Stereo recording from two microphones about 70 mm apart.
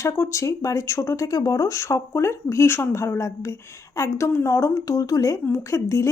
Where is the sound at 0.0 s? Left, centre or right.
Left.